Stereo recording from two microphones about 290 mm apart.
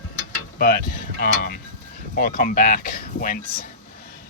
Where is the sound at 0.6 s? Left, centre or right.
Left.